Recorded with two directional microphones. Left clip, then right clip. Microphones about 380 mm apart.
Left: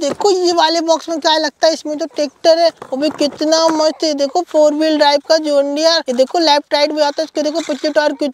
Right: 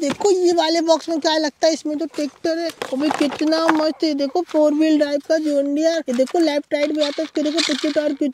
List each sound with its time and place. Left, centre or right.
0.0 s speech: left
2.1 s speech: left